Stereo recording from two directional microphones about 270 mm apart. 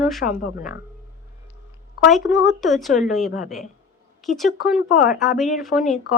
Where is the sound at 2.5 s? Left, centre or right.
Centre.